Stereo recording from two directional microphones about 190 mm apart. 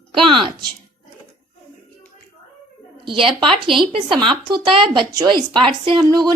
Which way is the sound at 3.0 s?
25° right (ahead or behind).